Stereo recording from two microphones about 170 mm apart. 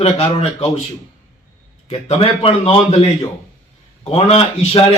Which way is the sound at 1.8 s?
35° left (ahead or behind).